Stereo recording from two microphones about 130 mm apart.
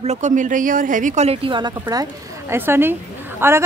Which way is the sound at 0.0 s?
60° right (ahead or behind).